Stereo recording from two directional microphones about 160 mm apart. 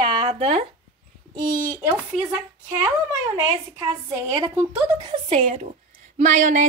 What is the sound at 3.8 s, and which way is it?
Speech, 15° right (ahead or behind).